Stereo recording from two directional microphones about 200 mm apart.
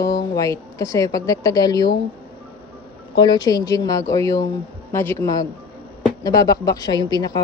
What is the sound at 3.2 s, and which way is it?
A woman's voice, 20° left (ahead or behind).